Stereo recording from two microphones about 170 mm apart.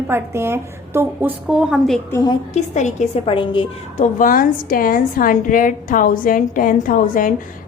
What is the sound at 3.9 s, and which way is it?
A woman's voice, 50° left (ahead or behind).